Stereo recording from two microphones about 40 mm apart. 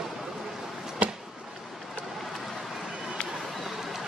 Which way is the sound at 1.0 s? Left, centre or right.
Right.